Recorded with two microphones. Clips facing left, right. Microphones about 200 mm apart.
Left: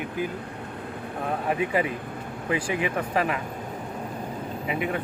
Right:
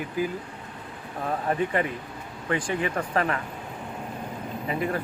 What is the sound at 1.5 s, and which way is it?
Speech, 10° left (ahead or behind).